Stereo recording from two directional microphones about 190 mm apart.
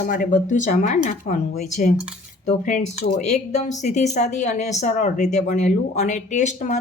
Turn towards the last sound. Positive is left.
turn(degrees=40)  # may be behind; listen again after turning